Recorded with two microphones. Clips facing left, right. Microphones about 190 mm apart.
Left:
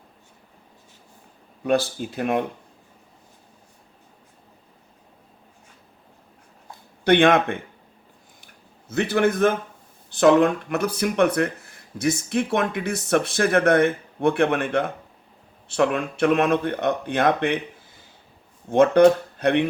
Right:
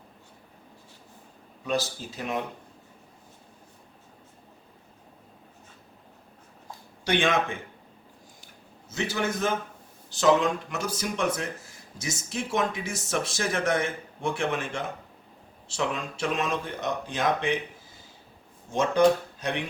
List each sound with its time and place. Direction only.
1.6 s speech: 55° left (ahead or behind)
7.0 s speech: 60° left (ahead or behind)
8.9 s speech: 60° left (ahead or behind)
18.7 s speech: 60° left (ahead or behind)